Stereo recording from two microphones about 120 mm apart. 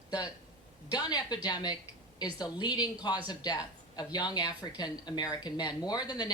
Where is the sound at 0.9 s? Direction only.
35° left (ahead or behind).